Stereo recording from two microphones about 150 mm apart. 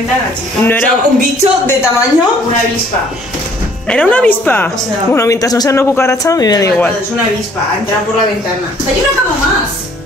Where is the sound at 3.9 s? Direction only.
10° left (ahead or behind); by 6.7 s 25° left (ahead or behind).